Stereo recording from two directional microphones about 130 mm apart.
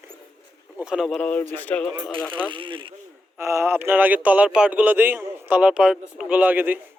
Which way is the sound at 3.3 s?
20° right (ahead or behind).